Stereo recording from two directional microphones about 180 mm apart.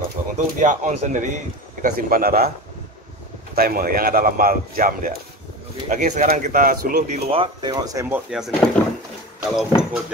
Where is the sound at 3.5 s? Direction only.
55° right (ahead or behind).